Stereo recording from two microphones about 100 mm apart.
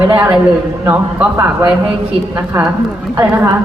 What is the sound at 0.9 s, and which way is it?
Speech, 20° right (ahead or behind).